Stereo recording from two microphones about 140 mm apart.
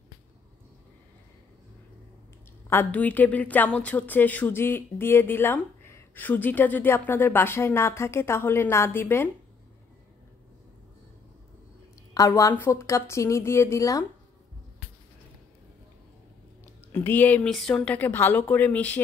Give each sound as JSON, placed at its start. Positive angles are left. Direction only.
{"t": 2.7, "sound": "a woman's voice", "side_deg": 15}
{"t": 12.1, "sound": "a woman's voice", "side_deg": 25}
{"t": 16.9, "sound": "a woman's voice", "side_deg": 15}